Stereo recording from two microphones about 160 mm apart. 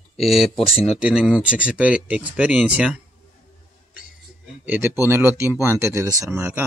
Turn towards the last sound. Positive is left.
turn(degrees=-10)  # may be behind; listen again after turning